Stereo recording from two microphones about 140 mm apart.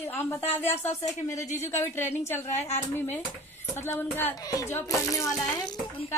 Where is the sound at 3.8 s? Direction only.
15° left (ahead or behind).